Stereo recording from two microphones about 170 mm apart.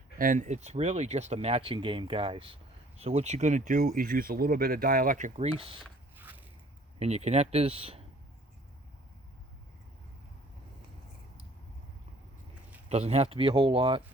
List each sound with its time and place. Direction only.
0.2 s speech: 50° right (ahead or behind)
5.8 s a sound: 10° right (ahead or behind)
7.0 s speech: 40° right (ahead or behind)
12.9 s speech: 35° right (ahead or behind)